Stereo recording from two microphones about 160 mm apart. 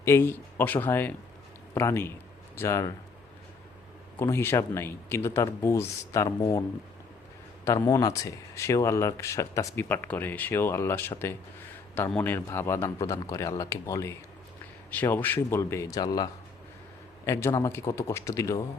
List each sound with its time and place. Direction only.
0.0 s speech: 15° left (ahead or behind)
4.2 s speech: 15° left (ahead or behind)
7.6 s speech: 20° left (ahead or behind)
12.1 s a man's voice: 10° left (ahead or behind)